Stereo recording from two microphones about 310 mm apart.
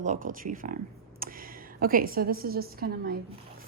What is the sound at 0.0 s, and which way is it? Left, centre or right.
A woman's voice, right.